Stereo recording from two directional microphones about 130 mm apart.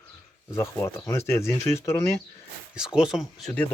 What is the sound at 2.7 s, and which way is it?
Speech, 5° right (ahead or behind).